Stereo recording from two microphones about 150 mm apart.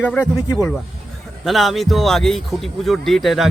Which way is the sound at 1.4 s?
Centre (ahead or behind).